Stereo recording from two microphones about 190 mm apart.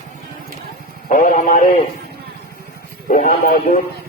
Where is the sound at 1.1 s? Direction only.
40° left (ahead or behind).